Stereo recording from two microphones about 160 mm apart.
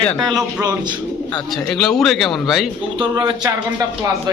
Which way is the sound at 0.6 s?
20° right (ahead or behind).